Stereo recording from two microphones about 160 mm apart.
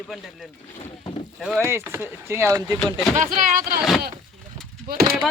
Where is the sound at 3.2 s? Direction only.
55° right (ahead or behind).